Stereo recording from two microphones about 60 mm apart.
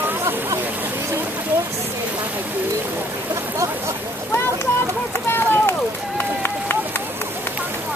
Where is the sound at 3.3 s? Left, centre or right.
Right.